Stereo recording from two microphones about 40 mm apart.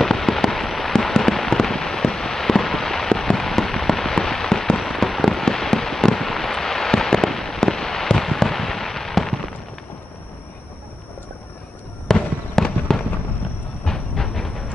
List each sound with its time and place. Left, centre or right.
0.0 s fireworks: centre
0.9 s a sound: centre
12.1 s fireworks: centre
13.8 s train: centre